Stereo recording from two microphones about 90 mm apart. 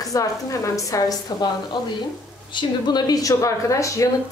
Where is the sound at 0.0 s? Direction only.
40° left (ahead or behind).